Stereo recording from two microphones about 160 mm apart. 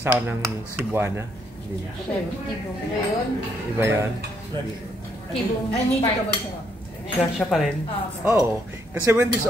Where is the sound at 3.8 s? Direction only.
15° right (ahead or behind).